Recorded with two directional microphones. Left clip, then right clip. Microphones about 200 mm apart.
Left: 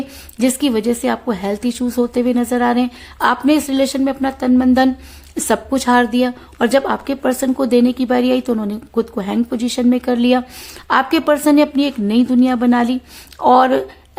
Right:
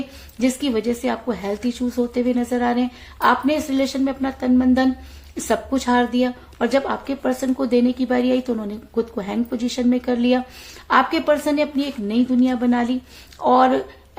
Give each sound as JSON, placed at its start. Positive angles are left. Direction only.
{"t": 0.3, "sound": "a woman's voice", "side_deg": 40}